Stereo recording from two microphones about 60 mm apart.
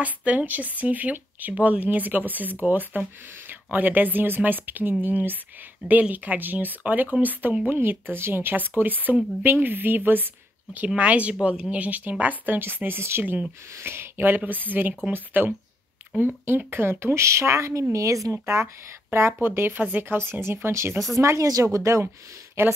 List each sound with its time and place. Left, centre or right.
0.0 s speech: right
16.0 s a sound: right
16.4 s speech: right
17.9 s speech: right
21.2 s speech: right
22.6 s speech: right